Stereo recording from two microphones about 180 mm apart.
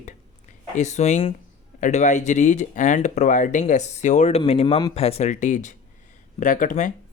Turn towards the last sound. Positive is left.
turn(degrees=45)  # may be behind; listen again after turning